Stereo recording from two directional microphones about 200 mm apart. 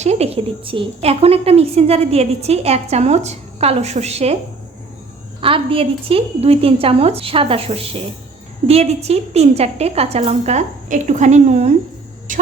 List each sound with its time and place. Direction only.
0.0 s a woman's voice: 30° right (ahead or behind)
5.4 s a woman's voice: 25° right (ahead or behind); by 12.4 s 40° right (ahead or behind)